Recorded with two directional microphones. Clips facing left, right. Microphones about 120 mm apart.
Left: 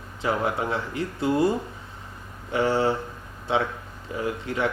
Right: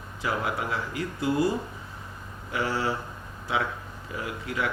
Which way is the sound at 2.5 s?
30° left (ahead or behind).